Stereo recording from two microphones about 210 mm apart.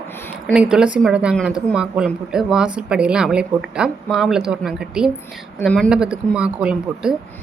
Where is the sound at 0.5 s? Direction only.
5° right (ahead or behind).